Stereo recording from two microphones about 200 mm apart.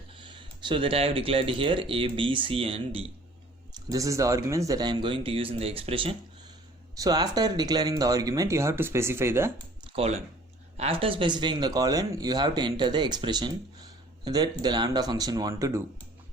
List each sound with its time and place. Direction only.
0.2 s speech: 25° right (ahead or behind)
3.8 s speech: 15° right (ahead or behind)
9.8 s a sound: 30° right (ahead or behind)
10.8 s speech: 30° right (ahead or behind)